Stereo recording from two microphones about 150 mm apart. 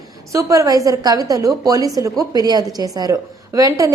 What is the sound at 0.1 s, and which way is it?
A woman's voice, 20° right (ahead or behind).